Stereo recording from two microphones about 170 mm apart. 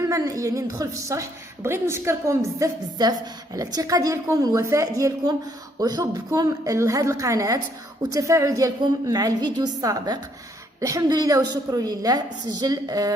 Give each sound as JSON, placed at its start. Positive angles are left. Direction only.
{"t": 0.0, "sound": "a woman's voice", "side_deg": -20}